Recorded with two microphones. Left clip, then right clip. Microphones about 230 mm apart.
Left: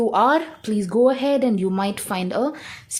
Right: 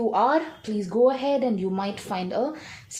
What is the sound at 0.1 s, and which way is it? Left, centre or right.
Speech, left.